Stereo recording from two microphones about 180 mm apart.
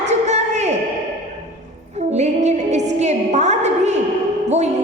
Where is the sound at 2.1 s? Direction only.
40° right (ahead or behind).